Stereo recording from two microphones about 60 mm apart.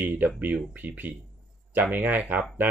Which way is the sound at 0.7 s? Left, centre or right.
Right.